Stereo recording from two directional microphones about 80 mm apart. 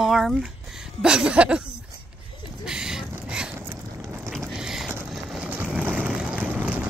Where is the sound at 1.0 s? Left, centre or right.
Centre.